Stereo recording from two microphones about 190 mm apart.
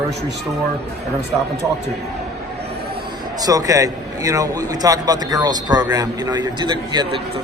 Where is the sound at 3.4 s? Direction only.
20° right (ahead or behind).